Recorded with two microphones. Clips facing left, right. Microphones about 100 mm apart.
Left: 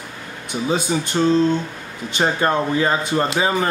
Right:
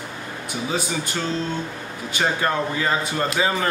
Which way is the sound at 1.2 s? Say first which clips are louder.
Left 11 dB; 25° left (ahead or behind).